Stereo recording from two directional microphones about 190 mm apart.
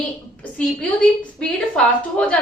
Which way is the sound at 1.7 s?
5° left (ahead or behind).